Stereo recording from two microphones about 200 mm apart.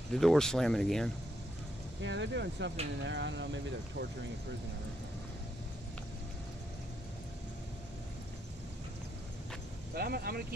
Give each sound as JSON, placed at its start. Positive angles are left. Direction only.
{"t": 0.1, "sound": "speech", "side_deg": 0}
{"t": 2.0, "sound": "speech", "side_deg": -60}
{"t": 9.9, "sound": "speech", "side_deg": -50}